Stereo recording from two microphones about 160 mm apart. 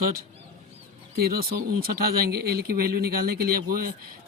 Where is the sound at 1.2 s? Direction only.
70° right (ahead or behind).